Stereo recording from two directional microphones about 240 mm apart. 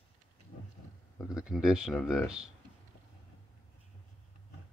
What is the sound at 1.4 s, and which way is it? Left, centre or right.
Speech, centre.